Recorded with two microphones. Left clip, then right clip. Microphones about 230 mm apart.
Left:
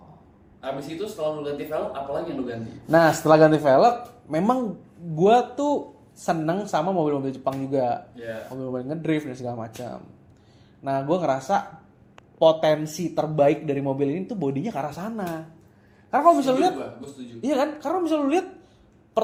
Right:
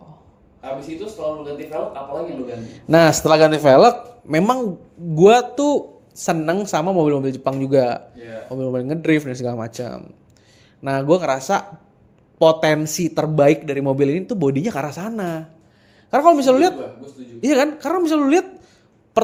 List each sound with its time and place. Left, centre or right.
2.7 s a man's voice: right